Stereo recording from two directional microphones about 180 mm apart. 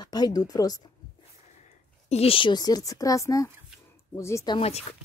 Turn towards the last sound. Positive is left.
turn(degrees=20)  # may be behind; listen again after turning